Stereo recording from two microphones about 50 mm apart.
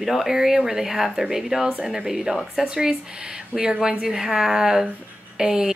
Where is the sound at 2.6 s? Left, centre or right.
Centre.